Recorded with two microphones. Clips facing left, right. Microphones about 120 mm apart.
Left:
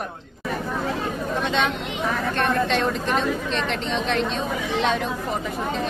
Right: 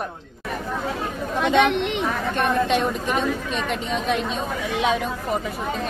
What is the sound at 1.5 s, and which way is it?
Speech, 70° right (ahead or behind).